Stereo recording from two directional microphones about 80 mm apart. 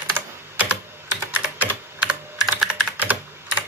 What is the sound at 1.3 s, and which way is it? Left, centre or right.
Computer keyboard, right.